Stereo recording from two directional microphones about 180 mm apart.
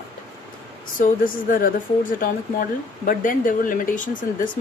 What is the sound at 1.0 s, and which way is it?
Speech, 50° left (ahead or behind).